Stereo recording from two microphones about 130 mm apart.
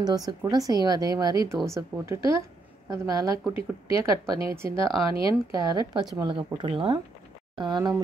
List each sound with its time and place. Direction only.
0.0 s a woman's voice: 30° right (ahead or behind)
2.1 s a woman's voice: 40° left (ahead or behind)
2.9 s a woman's voice: 30° right (ahead or behind)
3.9 s a woman's voice: 40° left (ahead or behind)
5.5 s speech: 30° right (ahead or behind)